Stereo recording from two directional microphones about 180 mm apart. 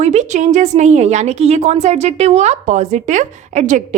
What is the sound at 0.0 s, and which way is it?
A woman's voice, 40° right (ahead or behind).